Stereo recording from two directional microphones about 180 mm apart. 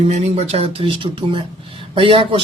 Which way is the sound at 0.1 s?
35° right (ahead or behind).